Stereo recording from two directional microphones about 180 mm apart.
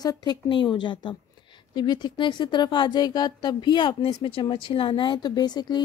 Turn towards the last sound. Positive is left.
turn(degrees=25)  # may be behind; listen again after turning